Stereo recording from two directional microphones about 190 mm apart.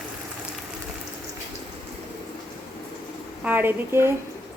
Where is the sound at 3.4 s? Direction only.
10° right (ahead or behind).